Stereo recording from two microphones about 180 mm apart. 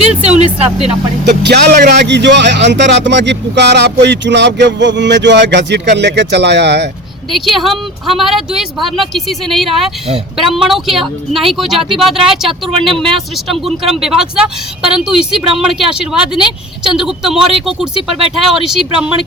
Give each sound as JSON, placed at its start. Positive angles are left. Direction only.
{"t": 1.4, "sound": "a man's voice", "side_deg": -65}
{"t": 7.3, "sound": "speech", "side_deg": 0}